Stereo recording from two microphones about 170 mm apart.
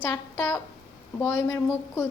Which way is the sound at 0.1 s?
15° left (ahead or behind).